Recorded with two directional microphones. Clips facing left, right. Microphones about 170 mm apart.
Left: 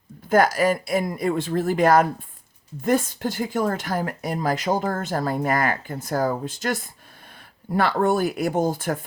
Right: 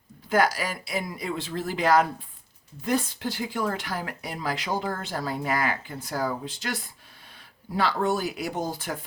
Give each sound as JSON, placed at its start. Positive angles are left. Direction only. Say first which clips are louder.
{"t": 0.3, "sound": "speech", "louder": "left 6 dB", "side_deg": 50}